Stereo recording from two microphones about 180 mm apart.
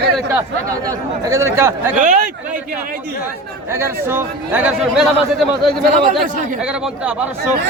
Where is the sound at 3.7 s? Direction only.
15° right (ahead or behind).